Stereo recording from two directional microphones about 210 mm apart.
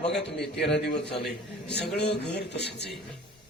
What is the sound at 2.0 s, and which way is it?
Speech, 55° left (ahead or behind).